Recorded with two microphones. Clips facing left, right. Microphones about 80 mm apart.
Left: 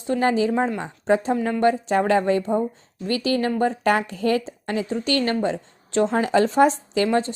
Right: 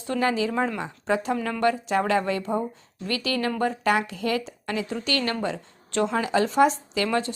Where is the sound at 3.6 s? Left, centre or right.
Left.